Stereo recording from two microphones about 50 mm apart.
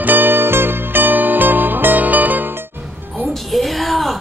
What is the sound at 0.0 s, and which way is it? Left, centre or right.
Music, right.